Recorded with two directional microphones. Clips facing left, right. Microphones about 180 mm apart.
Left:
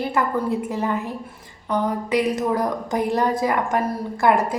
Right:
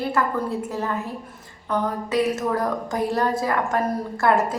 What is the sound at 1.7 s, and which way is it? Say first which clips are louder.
A woman's voice: left 2 dB; 15° left (ahead or behind).